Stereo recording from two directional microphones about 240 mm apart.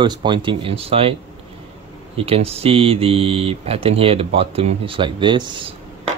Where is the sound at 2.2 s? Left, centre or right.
Right.